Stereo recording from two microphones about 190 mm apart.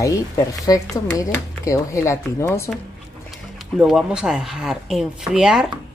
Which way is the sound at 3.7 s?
5° right (ahead or behind).